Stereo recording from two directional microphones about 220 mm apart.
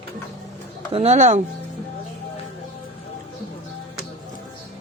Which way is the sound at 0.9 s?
30° right (ahead or behind).